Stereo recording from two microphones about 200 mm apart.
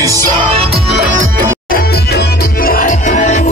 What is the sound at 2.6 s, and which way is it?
Music, 40° left (ahead or behind).